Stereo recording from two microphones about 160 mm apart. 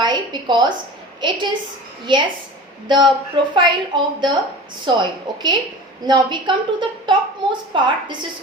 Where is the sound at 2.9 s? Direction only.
30° right (ahead or behind).